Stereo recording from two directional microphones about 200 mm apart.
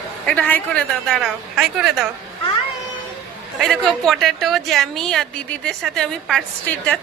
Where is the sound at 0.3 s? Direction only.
5° left (ahead or behind).